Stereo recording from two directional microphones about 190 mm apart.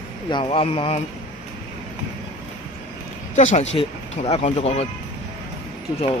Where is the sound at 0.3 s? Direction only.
25° left (ahead or behind).